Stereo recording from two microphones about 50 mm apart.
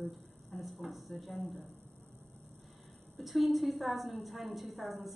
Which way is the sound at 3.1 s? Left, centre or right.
Centre.